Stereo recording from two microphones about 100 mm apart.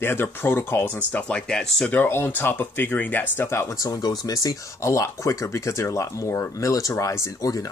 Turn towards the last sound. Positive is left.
turn(degrees=35)  # may be behind; listen again after turning